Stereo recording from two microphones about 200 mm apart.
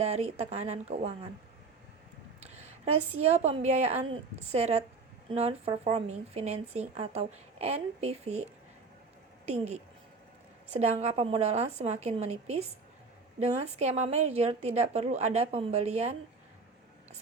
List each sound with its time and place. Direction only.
0.0 s speech: 30° right (ahead or behind)
2.4 s a woman's voice: 30° right (ahead or behind)
10.7 s speech: 35° right (ahead or behind)